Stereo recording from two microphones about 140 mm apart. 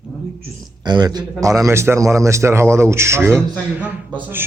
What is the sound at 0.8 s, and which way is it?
A man's voice, 30° right (ahead or behind).